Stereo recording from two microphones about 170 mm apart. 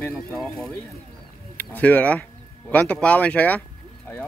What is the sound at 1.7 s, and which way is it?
Speech, 10° left (ahead or behind).